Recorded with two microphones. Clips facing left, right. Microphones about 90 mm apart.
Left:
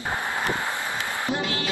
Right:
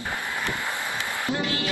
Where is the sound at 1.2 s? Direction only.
25° left (ahead or behind).